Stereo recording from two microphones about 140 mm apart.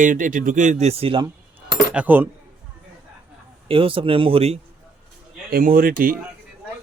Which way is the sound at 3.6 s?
40° right (ahead or behind).